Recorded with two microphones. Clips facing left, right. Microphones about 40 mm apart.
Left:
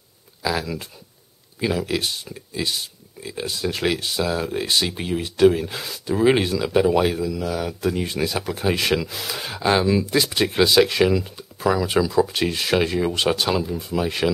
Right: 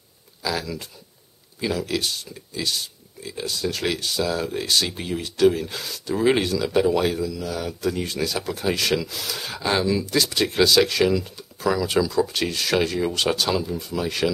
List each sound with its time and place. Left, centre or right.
0.4 s speech: centre